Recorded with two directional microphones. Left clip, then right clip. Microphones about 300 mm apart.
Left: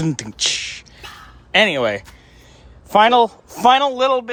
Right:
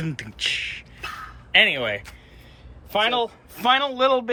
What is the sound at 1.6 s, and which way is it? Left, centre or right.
Speech, left.